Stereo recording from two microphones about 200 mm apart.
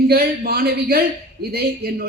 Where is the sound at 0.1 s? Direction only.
50° right (ahead or behind).